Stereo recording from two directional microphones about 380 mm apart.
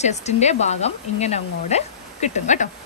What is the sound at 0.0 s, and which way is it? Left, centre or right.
Speech, centre.